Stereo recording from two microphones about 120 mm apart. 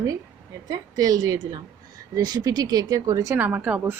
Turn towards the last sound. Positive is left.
turn(degrees=-15)  # may be behind; listen again after turning